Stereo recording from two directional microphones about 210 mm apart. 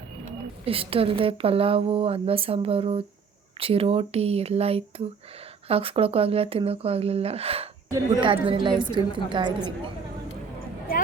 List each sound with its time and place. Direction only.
0.6 s a woman's voice: 25° right (ahead or behind)